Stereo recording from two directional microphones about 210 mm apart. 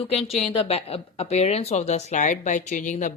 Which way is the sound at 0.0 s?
30° left (ahead or behind).